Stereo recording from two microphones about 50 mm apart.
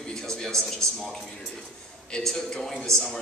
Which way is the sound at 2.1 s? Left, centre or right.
Centre.